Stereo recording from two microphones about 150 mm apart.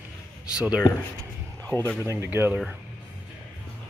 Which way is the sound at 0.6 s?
5° right (ahead or behind).